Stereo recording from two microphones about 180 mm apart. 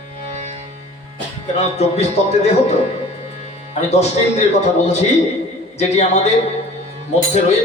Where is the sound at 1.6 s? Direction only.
35° left (ahead or behind).